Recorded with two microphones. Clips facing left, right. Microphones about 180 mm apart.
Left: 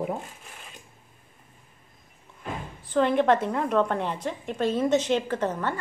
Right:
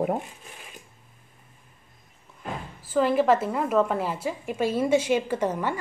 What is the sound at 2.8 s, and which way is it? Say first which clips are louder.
A woman's voice: even; 5° right (ahead or behind).